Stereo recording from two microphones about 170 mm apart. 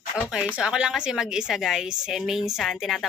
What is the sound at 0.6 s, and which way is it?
A woman's voice, 5° right (ahead or behind).